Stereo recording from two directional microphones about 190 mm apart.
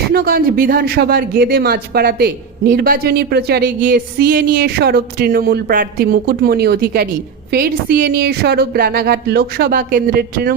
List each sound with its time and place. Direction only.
0.1 s speech: 55° right (ahead or behind)